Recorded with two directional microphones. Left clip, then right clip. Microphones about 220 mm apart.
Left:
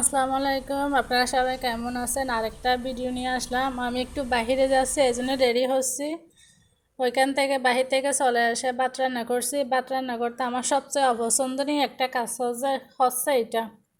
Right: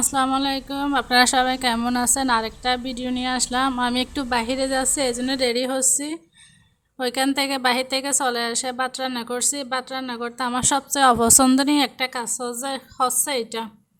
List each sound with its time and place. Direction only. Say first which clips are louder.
0.1 s a woman's voice: right 1 dB; 25° right (ahead or behind)
7.0 s a woman's voice: even; 25° right (ahead or behind)